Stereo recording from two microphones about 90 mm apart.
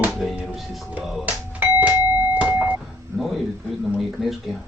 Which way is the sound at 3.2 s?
Centre (ahead or behind).